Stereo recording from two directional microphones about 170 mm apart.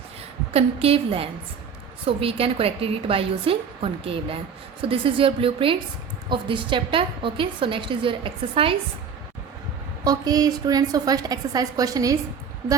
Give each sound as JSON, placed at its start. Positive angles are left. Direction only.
{"t": 0.5, "sound": "a woman's voice", "side_deg": -35}
{"t": 10.0, "sound": "a woman's voice", "side_deg": -20}